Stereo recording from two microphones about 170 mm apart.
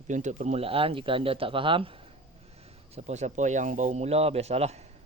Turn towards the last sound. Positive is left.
turn(degrees=-40)  # may be behind; listen again after turning